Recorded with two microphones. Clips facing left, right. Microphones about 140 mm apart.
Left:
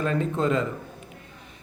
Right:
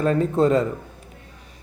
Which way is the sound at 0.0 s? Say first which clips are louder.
Right 6 dB; 40° right (ahead or behind).